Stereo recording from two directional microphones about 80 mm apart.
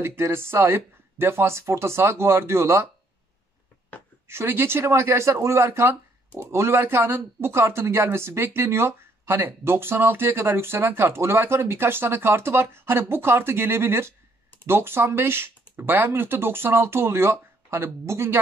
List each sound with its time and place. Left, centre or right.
0.0 s speech: right
4.3 s speech: right